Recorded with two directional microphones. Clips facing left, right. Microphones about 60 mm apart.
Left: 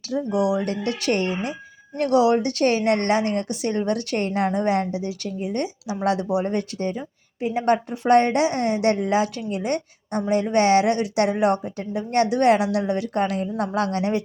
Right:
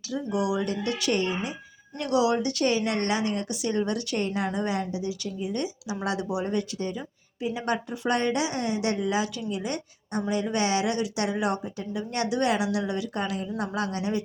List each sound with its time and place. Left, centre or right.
0.1 s a woman's voice: left
2.0 s a woman's voice: left